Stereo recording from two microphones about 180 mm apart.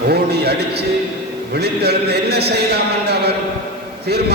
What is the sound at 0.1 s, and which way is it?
A man's voice, 65° right (ahead or behind).